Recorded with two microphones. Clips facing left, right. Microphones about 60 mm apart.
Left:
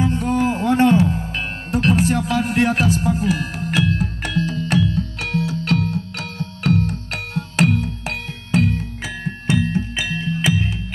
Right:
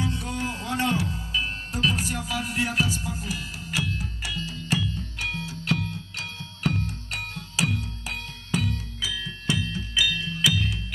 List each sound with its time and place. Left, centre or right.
0.0 s music: left